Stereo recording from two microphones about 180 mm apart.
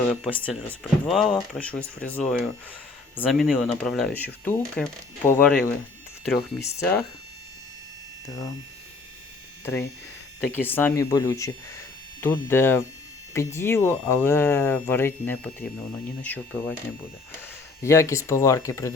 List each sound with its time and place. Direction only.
0.0 s speech: 5° left (ahead or behind)
6.7 s speech: 15° left (ahead or behind)
10.4 s speech: 10° left (ahead or behind)
17.8 s speech: 15° left (ahead or behind)